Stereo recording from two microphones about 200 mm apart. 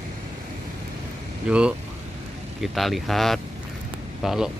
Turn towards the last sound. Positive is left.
turn(degrees=0)  # may be behind; listen again after turning